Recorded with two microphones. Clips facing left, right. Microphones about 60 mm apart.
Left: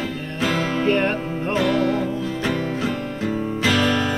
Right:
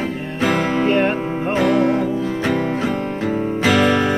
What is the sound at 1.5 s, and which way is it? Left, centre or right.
Music, right.